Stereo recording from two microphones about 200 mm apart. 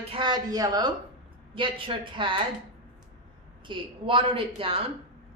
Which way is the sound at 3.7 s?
25° right (ahead or behind).